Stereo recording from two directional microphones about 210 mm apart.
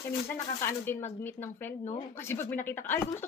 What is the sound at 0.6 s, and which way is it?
Speech, 10° left (ahead or behind).